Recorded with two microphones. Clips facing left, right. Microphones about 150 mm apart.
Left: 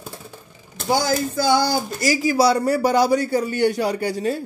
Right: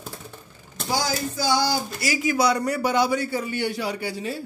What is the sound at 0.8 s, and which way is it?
Speech, 50° left (ahead or behind).